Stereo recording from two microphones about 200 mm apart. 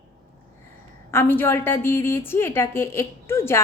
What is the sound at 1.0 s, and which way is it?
A woman's voice, 10° left (ahead or behind).